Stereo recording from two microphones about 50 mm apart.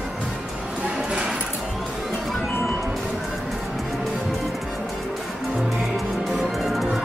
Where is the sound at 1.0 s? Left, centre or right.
Centre.